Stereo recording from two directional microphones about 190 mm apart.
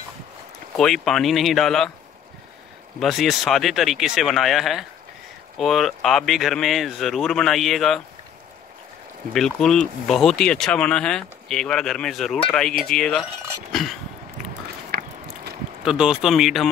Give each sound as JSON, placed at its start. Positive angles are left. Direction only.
{"t": 0.7, "sound": "speech", "side_deg": 0}
{"t": 3.0, "sound": "speech", "side_deg": 0}
{"t": 9.3, "sound": "speech", "side_deg": 0}
{"t": 13.7, "sound": "a sound", "side_deg": 0}
{"t": 14.9, "sound": "a sound", "side_deg": -55}
{"t": 15.8, "sound": "speech", "side_deg": -5}